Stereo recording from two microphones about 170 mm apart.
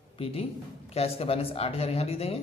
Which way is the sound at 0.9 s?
35° left (ahead or behind).